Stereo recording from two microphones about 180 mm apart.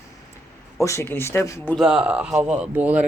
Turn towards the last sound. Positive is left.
turn(degrees=-10)  # may be behind; listen again after turning